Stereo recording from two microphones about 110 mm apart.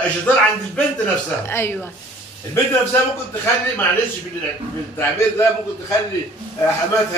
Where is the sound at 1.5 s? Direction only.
20° left (ahead or behind).